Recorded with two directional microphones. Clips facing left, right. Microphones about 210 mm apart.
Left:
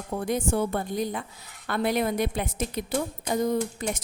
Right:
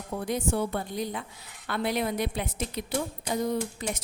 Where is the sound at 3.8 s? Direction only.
50° left (ahead or behind).